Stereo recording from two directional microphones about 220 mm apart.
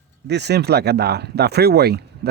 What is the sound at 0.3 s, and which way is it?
Speech, 50° right (ahead or behind).